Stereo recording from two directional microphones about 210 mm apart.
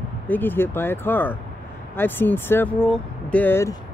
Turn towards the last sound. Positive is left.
turn(degrees=10)  # may be behind; listen again after turning